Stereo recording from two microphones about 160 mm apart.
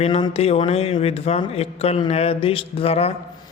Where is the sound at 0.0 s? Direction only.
35° left (ahead or behind).